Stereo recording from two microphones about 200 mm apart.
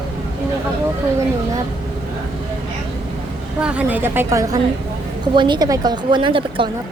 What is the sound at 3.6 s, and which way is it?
A woman's voice, 5° right (ahead or behind).